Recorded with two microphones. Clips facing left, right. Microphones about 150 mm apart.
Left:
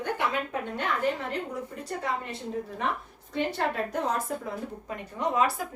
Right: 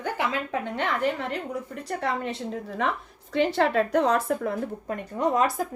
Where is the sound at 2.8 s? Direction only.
90° right; by 5.4 s 50° right (ahead or behind).